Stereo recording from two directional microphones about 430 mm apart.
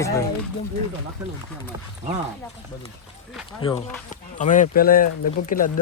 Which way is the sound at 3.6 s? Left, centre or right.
Centre.